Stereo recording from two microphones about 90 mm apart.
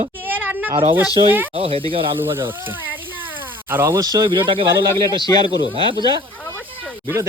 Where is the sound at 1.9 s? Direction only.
75° right (ahead or behind).